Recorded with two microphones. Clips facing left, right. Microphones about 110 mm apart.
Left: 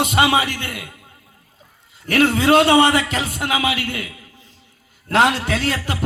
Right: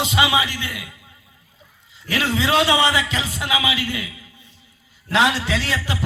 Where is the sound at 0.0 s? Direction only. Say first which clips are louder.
Left 3 dB; 55° left (ahead or behind).